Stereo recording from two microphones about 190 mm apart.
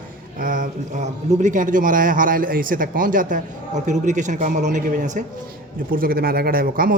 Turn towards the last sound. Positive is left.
turn(degrees=-50)  # may be behind; listen again after turning